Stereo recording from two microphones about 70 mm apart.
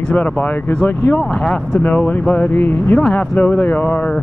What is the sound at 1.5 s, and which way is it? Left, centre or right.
Speech, centre.